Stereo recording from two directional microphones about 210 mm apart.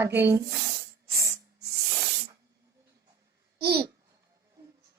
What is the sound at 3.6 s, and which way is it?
Speech, 50° right (ahead or behind).